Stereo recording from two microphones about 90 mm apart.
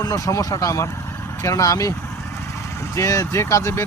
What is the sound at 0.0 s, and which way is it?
Speech, 40° left (ahead or behind).